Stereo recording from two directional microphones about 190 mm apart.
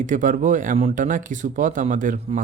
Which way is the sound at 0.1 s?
45° right (ahead or behind).